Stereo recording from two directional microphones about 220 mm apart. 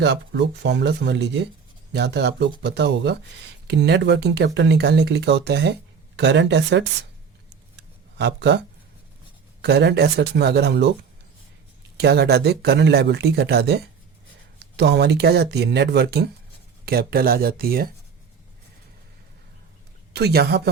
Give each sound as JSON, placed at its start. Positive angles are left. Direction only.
{"t": 0.0, "sound": "speech", "side_deg": -50}
{"t": 7.8, "sound": "a sound", "side_deg": -50}
{"t": 9.6, "sound": "speech", "side_deg": -50}
{"t": 11.9, "sound": "speech", "side_deg": -50}
{"t": 20.1, "sound": "speech", "side_deg": -45}